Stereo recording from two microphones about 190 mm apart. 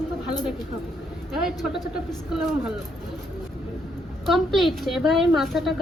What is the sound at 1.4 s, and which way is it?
Speech, 5° right (ahead or behind).